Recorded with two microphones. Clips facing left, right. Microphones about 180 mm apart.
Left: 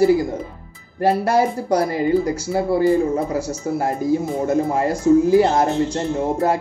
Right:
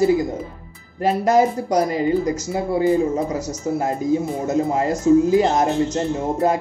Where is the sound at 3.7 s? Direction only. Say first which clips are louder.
Left 1 dB; 20° right (ahead or behind).